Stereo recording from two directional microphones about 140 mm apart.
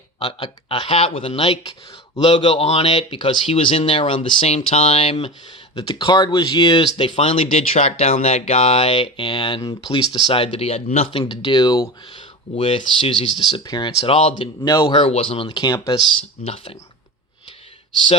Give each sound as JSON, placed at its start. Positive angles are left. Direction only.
{"t": 0.2, "sound": "speech", "side_deg": 30}
{"t": 5.7, "sound": "speech", "side_deg": 30}
{"t": 12.5, "sound": "speech", "side_deg": 40}
{"t": 15.0, "sound": "speech", "side_deg": 45}
{"t": 16.4, "sound": "speech", "side_deg": 45}